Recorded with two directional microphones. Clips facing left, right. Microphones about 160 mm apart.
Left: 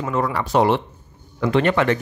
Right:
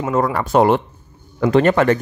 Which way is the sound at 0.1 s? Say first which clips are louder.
Right 4 dB; 45° right (ahead or behind).